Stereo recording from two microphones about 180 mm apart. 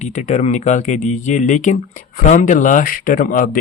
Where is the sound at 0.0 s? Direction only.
40° left (ahead or behind).